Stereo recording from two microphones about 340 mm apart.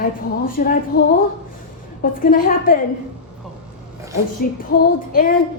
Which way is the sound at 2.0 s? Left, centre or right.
Left.